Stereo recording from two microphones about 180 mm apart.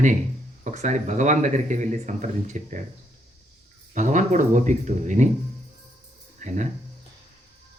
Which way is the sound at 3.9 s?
45° right (ahead or behind).